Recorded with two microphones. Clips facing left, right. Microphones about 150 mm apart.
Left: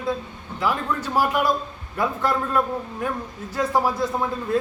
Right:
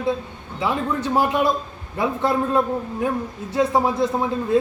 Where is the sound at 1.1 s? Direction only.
25° right (ahead or behind).